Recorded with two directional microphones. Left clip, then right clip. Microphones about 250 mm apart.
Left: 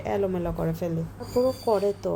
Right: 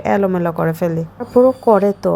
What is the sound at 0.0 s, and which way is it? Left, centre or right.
Speech, right.